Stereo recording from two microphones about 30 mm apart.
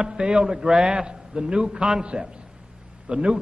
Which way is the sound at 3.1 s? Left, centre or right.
Right.